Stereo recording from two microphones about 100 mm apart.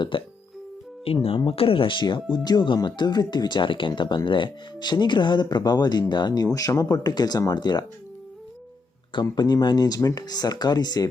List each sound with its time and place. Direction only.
0.1 s speech: 60° left (ahead or behind)
1.0 s speech: 75° left (ahead or behind); by 7.9 s 45° left (ahead or behind)
9.3 s speech: 45° left (ahead or behind)